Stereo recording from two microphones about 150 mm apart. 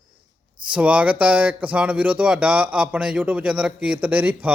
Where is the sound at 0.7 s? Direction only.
10° right (ahead or behind).